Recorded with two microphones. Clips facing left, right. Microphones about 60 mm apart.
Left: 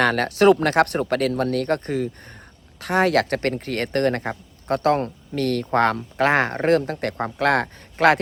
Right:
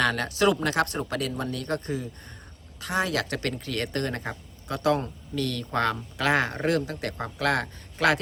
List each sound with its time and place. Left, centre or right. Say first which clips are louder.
0.0 s a man's voice: left 7 dB; left